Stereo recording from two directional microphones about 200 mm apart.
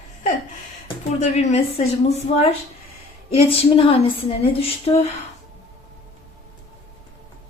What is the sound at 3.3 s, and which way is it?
A woman's voice, 30° left (ahead or behind).